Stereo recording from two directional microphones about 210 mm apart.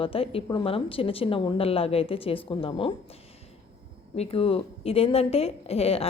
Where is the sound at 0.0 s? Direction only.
25° left (ahead or behind).